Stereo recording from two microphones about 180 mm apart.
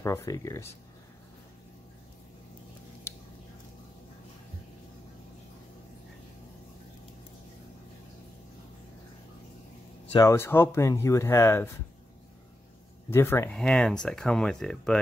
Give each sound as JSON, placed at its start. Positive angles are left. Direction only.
{"t": 0.0, "sound": "speech", "side_deg": 15}
{"t": 10.1, "sound": "speech", "side_deg": 15}
{"t": 13.1, "sound": "speech", "side_deg": 15}